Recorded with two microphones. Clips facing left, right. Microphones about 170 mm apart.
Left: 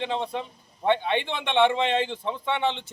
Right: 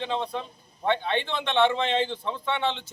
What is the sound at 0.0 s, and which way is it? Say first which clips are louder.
A man's voice: left 1 dB; 20° left (ahead or behind).